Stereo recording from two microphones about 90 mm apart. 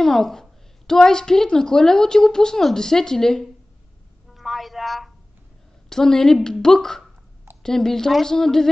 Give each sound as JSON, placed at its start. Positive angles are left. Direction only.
{"t": 0.0, "sound": "a woman's voice", "side_deg": 5}
{"t": 4.3, "sound": "a sound", "side_deg": 0}
{"t": 5.9, "sound": "a woman's voice", "side_deg": 5}